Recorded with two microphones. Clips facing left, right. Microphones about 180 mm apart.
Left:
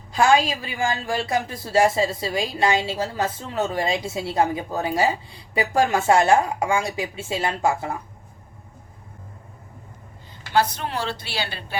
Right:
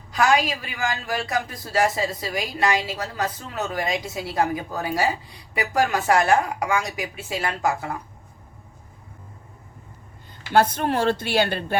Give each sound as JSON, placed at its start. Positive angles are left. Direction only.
{"t": 0.1, "sound": "a man's voice", "side_deg": 25}
{"t": 10.5, "sound": "a woman's voice", "side_deg": -55}